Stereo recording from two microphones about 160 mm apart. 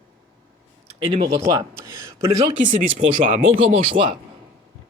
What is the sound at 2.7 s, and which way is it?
Speech, 55° right (ahead or behind).